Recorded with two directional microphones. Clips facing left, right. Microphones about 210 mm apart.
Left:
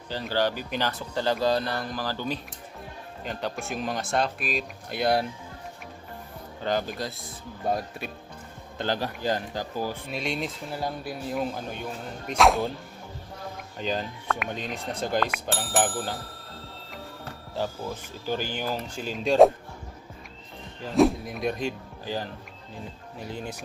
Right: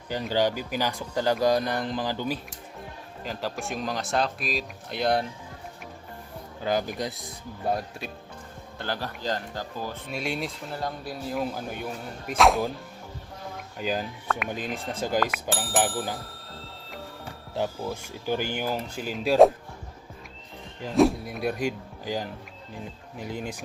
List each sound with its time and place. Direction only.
0.1 s speech: 15° right (ahead or behind)
3.2 s speech: centre (ahead or behind)
6.6 s speech: 10° right (ahead or behind)
7.7 s speech: centre (ahead or behind)
8.8 s speech: 15° left (ahead or behind)
10.2 s speech: centre (ahead or behind)
13.7 s speech: 5° right (ahead or behind)
17.6 s speech: 15° right (ahead or behind)
20.9 s speech: centre (ahead or behind); by 23.6 s 15° right (ahead or behind)